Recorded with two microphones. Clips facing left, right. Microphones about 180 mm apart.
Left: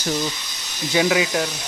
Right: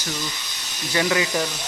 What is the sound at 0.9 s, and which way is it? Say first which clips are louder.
Speech: left 3 dB; 15° left (ahead or behind).